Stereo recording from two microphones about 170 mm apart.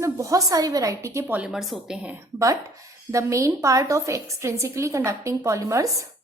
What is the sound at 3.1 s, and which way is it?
A woman's voice, 20° right (ahead or behind).